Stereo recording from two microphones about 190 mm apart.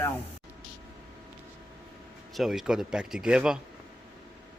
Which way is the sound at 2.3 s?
Centre (ahead or behind).